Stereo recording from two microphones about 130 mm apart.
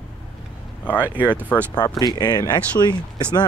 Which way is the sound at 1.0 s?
15° right (ahead or behind).